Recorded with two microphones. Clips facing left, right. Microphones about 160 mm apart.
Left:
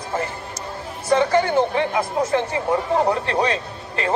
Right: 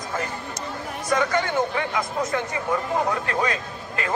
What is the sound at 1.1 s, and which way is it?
Speech, 30° left (ahead or behind).